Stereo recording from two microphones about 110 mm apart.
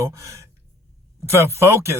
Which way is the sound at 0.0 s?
30° right (ahead or behind).